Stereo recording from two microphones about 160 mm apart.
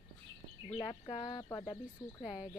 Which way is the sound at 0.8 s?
35° left (ahead or behind).